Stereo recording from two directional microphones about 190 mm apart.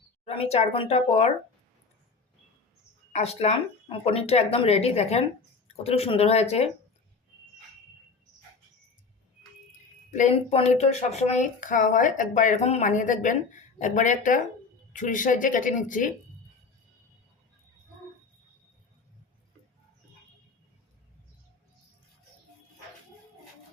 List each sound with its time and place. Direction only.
0.3 s a woman's voice: 35° left (ahead or behind)
3.1 s a woman's voice: 35° left (ahead or behind)
10.1 s a woman's voice: 40° left (ahead or behind)